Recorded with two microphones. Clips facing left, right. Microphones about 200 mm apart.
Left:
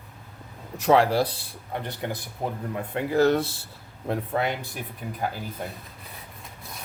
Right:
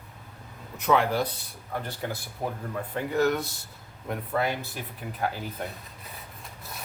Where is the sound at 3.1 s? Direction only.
30° left (ahead or behind).